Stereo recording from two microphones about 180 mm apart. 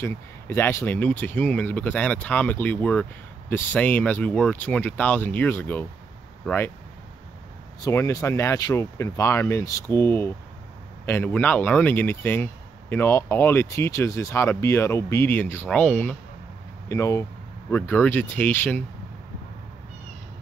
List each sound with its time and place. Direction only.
0.0 s speech: 15° left (ahead or behind)
7.8 s speech: 20° left (ahead or behind)